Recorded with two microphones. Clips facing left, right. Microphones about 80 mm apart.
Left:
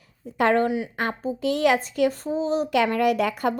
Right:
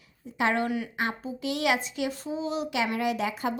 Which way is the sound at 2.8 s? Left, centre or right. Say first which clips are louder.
Left 5 dB; left.